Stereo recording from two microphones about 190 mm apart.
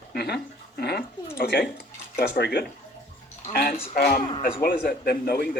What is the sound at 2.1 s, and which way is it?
A man's voice, 55° left (ahead or behind).